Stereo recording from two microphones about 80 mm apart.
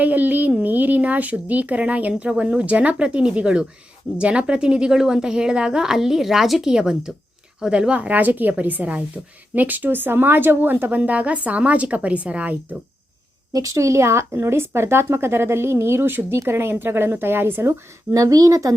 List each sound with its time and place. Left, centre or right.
0.0 s a woman's voice: right
13.5 s speech: right
18.1 s a child's voice: right